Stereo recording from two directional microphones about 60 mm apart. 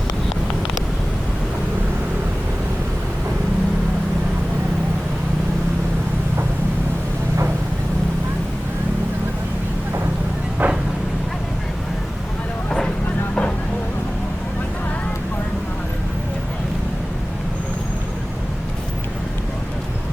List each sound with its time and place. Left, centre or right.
10.6 s vehicle: right